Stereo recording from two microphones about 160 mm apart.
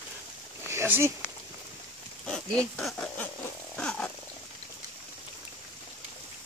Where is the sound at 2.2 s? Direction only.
5° left (ahead or behind).